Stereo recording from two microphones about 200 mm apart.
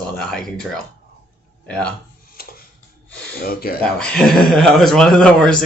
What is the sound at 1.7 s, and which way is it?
Speech, 5° left (ahead or behind).